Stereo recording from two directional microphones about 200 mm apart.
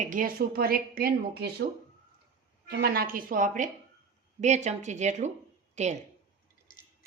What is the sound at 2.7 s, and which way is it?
A woman's voice, 50° right (ahead or behind).